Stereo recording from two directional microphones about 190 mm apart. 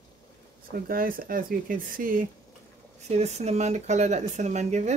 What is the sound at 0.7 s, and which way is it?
Speech, 50° right (ahead or behind).